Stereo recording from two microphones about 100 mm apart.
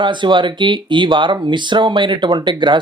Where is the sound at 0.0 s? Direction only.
50° right (ahead or behind).